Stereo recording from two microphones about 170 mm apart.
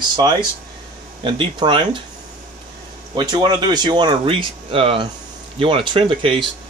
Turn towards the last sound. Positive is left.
turn(degrees=-30)  # may be behind; listen again after turning